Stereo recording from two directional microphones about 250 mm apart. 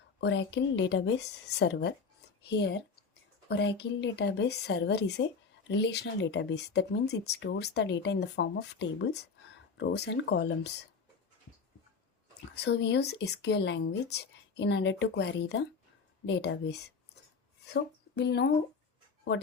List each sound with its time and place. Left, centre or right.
0.2 s speech: left
12.5 s speech: left
17.7 s speech: left